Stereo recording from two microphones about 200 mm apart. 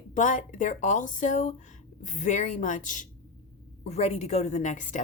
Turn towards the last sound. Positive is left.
turn(degrees=40)  # may be behind; listen again after turning